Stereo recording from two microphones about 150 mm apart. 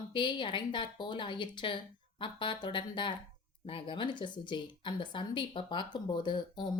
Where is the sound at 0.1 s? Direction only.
30° left (ahead or behind).